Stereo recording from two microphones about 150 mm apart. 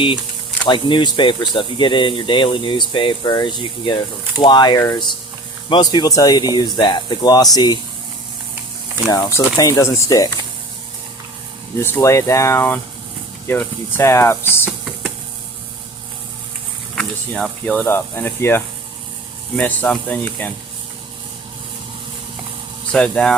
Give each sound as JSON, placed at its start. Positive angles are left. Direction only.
{"t": 0.7, "sound": "speech", "side_deg": 30}
{"t": 9.0, "sound": "speech", "side_deg": 20}
{"t": 11.8, "sound": "speech", "side_deg": 15}
{"t": 16.9, "sound": "speech", "side_deg": 5}
{"t": 22.9, "sound": "speech", "side_deg": 5}